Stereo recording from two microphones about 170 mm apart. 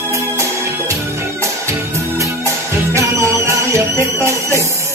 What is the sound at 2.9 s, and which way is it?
Music, 15° right (ahead or behind).